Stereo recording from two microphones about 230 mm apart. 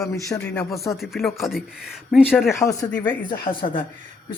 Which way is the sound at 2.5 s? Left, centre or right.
Centre.